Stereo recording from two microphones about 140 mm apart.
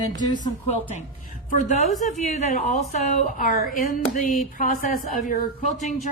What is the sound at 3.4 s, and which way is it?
Speech, 90° left.